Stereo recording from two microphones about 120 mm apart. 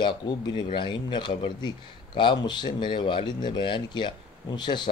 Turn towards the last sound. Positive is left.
turn(degrees=40)  # may be behind; listen again after turning